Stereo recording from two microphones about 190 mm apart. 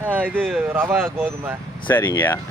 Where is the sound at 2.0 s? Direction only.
15° left (ahead or behind).